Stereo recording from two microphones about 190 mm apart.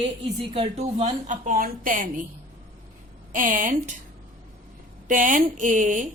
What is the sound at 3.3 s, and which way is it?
Speech, 45° right (ahead or behind).